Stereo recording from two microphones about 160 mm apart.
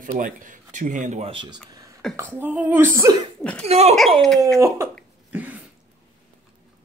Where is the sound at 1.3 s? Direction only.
30° right (ahead or behind).